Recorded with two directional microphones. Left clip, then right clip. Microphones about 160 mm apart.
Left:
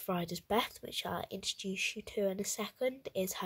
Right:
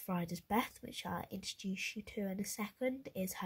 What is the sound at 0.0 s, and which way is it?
Speech, 25° left (ahead or behind).